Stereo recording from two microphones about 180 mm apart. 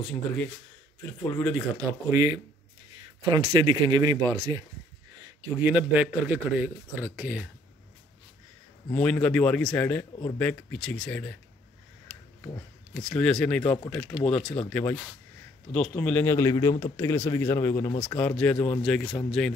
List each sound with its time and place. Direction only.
0.0 s speech: 5° left (ahead or behind)
1.8 s speech: 15° right (ahead or behind)
5.6 s a man's voice: 10° right (ahead or behind)
8.9 s a man's voice: 5° left (ahead or behind)
12.5 s a man's voice: 5° left (ahead or behind)